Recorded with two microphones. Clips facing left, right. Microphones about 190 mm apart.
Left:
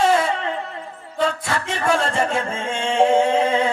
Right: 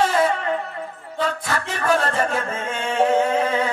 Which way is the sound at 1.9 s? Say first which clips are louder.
Even; 25° left (ahead or behind).